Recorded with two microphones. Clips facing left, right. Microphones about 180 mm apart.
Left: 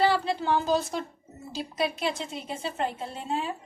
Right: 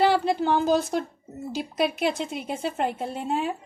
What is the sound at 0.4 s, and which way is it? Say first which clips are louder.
A woman's voice: right 1 dB; 50° right (ahead or behind).